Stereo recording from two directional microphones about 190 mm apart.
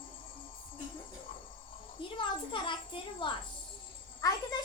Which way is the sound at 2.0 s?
25° left (ahead or behind).